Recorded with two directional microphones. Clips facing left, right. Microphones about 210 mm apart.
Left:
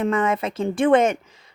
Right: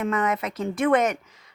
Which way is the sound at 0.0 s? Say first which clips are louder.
Left 4 dB; 30° left (ahead or behind).